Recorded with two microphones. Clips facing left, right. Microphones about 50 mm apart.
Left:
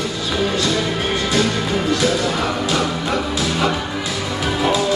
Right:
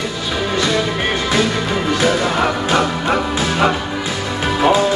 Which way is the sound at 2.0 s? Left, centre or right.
Right.